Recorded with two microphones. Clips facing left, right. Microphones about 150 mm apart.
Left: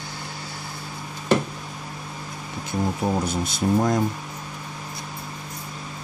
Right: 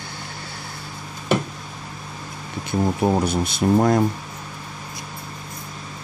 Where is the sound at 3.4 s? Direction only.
65° right (ahead or behind).